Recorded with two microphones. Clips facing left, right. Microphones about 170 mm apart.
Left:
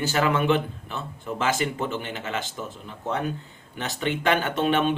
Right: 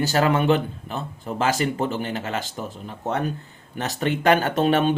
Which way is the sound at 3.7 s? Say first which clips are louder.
Right 3 dB; 45° right (ahead or behind).